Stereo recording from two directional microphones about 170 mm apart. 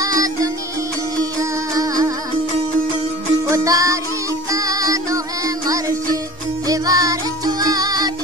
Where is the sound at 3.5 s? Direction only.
20° right (ahead or behind).